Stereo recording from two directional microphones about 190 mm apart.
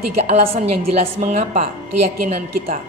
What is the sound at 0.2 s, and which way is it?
Speech, 35° right (ahead or behind).